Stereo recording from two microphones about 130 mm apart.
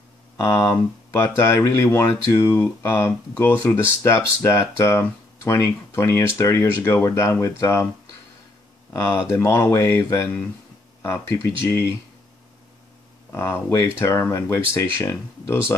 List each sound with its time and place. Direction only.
0.4 s speech: 25° left (ahead or behind)
8.9 s speech: 20° left (ahead or behind)
13.3 s speech: 20° left (ahead or behind)